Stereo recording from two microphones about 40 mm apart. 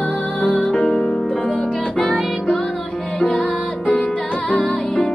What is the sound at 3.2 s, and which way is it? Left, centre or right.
Music, left.